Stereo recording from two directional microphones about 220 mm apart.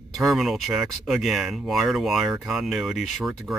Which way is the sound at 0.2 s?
Centre (ahead or behind).